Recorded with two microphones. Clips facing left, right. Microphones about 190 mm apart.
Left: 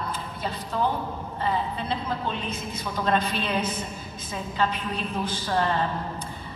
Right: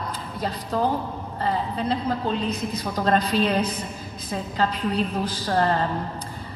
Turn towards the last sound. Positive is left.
turn(degrees=-40)  # may be behind; listen again after turning